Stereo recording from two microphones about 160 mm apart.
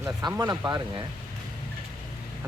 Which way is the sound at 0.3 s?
20° right (ahead or behind).